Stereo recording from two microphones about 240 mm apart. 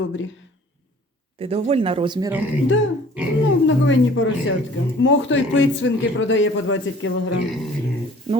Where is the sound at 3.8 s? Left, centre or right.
Left.